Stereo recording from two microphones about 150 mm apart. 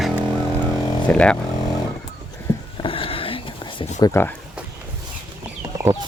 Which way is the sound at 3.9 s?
25° left (ahead or behind).